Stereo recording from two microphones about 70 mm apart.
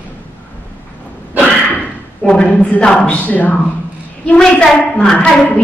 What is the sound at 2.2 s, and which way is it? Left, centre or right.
A woman's voice, centre.